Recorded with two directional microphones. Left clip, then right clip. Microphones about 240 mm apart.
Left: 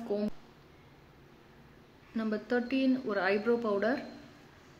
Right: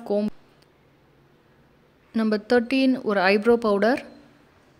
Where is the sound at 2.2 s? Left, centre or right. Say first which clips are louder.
Right 11 dB; right.